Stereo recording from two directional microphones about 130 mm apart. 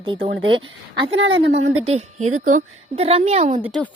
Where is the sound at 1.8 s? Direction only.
55° right (ahead or behind); by 2.7 s 80° right.